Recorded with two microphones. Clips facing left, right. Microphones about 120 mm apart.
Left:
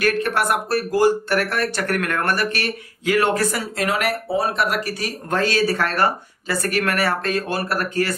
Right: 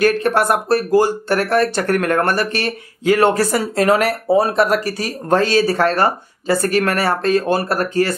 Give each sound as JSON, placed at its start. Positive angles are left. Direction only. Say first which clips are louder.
{"t": 0.0, "sound": "speech", "louder": "right 5 dB", "side_deg": -30}